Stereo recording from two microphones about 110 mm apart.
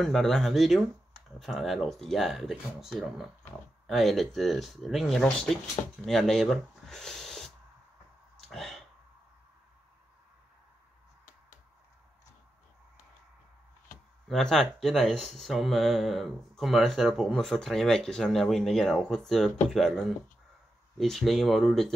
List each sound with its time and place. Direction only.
0.0 s speech: 5° left (ahead or behind)
8.4 s a sound: centre (ahead or behind)
14.3 s speech: 5° left (ahead or behind)